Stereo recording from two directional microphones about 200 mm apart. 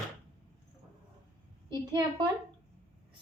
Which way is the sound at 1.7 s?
25° right (ahead or behind).